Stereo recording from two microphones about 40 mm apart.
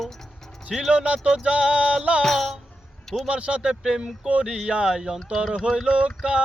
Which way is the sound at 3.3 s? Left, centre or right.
Right.